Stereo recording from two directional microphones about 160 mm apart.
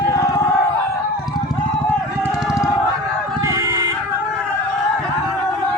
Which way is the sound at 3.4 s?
20° right (ahead or behind).